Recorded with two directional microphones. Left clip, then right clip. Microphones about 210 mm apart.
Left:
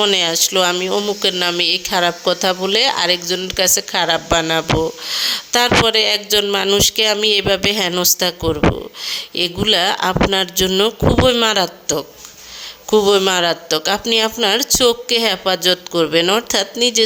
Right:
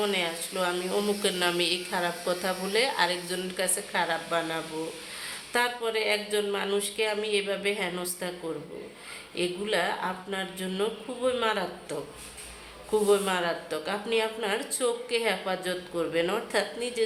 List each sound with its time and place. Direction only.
0.0 s speech: 45° left (ahead or behind)
3.8 s speech: 45° left (ahead or behind)